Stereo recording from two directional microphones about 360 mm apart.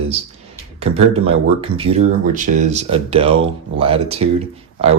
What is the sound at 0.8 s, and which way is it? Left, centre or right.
Speech, centre.